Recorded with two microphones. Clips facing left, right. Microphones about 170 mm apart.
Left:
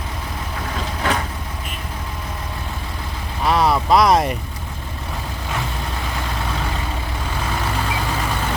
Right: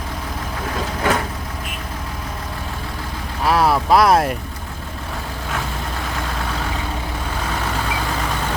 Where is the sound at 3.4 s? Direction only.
Centre (ahead or behind).